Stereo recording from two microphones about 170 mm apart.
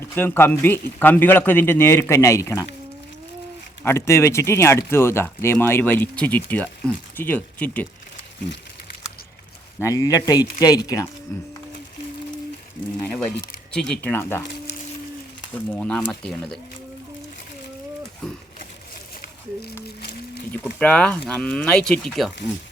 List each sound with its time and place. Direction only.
0.0 s speech: 10° left (ahead or behind)
3.8 s speech: 15° left (ahead or behind)
9.8 s speech: 20° left (ahead or behind)
13.0 s speech: 5° left (ahead or behind)
15.5 s speech: 5° left (ahead or behind)
20.0 s music: 65° left (ahead or behind)
20.5 s speech: 10° left (ahead or behind)